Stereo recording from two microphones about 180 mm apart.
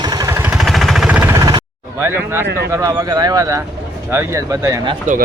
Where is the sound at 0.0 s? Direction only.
20° right (ahead or behind).